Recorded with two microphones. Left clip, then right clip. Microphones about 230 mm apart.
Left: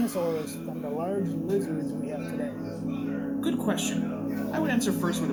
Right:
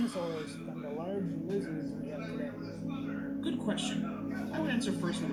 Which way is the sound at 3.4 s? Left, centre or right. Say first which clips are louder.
Left 6 dB; left.